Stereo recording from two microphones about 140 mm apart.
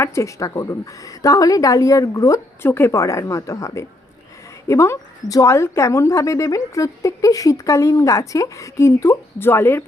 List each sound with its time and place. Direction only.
0.0 s a woman's voice: 20° left (ahead or behind)